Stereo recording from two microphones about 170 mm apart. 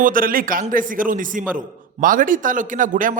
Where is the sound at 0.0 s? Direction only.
55° right (ahead or behind).